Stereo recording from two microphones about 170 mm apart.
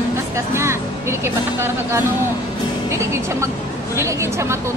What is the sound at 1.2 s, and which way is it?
Speech, 15° right (ahead or behind).